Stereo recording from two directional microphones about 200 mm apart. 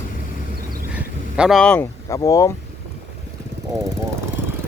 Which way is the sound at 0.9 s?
5° right (ahead or behind).